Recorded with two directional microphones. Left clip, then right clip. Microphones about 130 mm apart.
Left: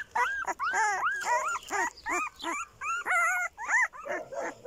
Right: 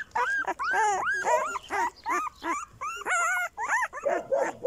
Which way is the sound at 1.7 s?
Centre (ahead or behind).